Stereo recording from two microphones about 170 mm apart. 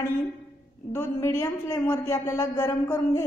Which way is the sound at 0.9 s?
15° left (ahead or behind).